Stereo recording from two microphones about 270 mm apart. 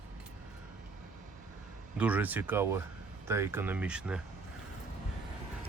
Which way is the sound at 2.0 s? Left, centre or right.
Centre.